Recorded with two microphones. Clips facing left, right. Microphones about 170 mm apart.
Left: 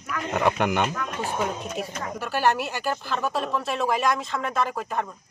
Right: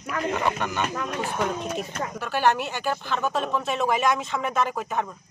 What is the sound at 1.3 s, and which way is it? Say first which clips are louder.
Speech: right 1 dB; 5° left (ahead or behind).